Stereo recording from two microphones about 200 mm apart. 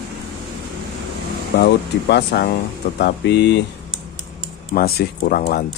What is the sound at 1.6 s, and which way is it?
Speech, 55° left (ahead or behind).